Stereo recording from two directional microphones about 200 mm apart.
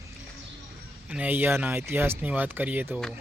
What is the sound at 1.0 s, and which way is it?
Speech, 5° right (ahead or behind).